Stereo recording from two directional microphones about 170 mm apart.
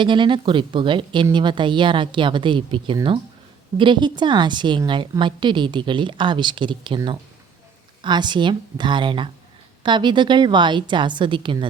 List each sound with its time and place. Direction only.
0.0 s a woman's voice: 30° right (ahead or behind)